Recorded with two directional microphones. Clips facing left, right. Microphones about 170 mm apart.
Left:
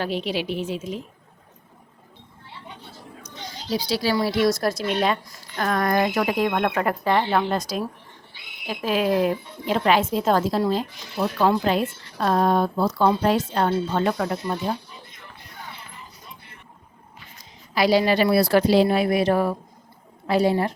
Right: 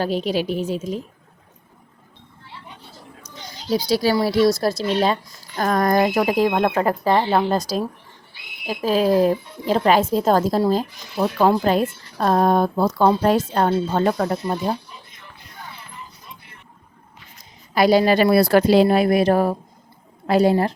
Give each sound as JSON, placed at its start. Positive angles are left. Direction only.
{"t": 0.0, "sound": "speech", "side_deg": -40}
{"t": 3.7, "sound": "speech", "side_deg": -40}
{"t": 17.7, "sound": "speech", "side_deg": -50}